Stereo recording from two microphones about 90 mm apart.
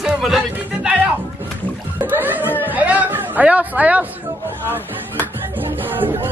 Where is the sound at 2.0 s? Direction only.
20° right (ahead or behind).